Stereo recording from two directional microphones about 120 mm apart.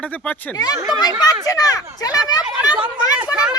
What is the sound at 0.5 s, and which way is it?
Speech, 35° left (ahead or behind).